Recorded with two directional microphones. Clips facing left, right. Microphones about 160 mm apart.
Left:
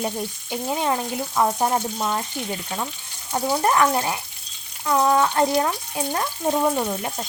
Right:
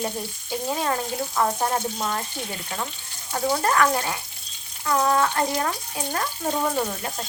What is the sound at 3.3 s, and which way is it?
Speech, 20° left (ahead or behind).